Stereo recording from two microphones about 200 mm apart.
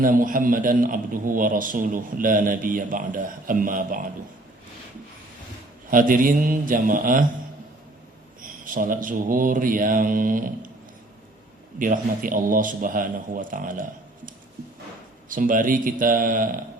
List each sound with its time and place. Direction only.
0.0 s a man's voice: 45° right (ahead or behind)
5.9 s a man's voice: 45° right (ahead or behind)
8.4 s a man's voice: 45° right (ahead or behind)
11.8 s a man's voice: 40° right (ahead or behind)
15.3 s a man's voice: 40° right (ahead or behind)